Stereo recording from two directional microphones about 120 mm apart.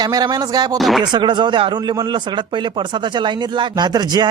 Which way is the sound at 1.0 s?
40° right (ahead or behind).